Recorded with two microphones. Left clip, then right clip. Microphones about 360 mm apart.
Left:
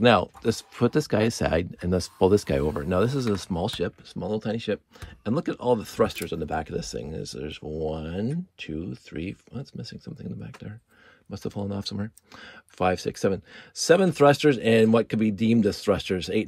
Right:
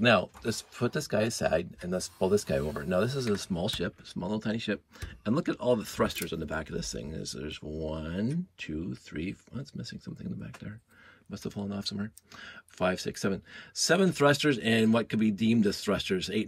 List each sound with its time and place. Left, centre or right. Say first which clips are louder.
0.0 s speech: left 5 dB; centre